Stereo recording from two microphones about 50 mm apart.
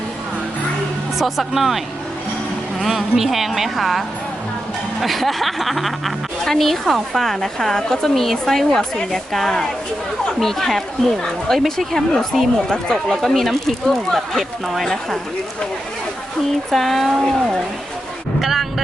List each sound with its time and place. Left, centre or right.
1.2 s a woman's voice: centre
2.8 s a woman's voice: centre
16.7 s a woman's voice: centre
18.3 s a sound: centre